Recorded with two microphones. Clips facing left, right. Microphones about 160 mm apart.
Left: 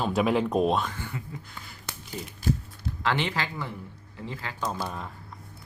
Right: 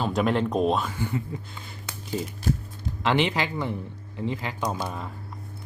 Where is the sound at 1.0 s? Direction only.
20° right (ahead or behind).